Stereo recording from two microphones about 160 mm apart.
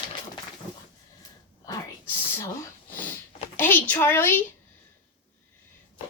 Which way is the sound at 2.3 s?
20° left (ahead or behind).